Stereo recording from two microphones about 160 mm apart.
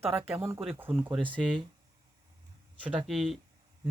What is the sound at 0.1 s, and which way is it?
Speech, 15° right (ahead or behind).